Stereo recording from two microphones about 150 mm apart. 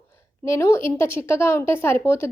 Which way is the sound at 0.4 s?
20° left (ahead or behind).